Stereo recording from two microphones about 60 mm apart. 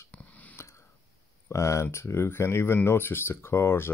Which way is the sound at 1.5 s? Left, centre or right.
Left.